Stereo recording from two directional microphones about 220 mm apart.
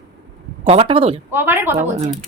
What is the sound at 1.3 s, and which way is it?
Speech, 10° right (ahead or behind).